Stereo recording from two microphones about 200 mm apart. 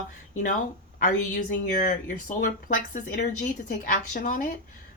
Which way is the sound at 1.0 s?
40° left (ahead or behind).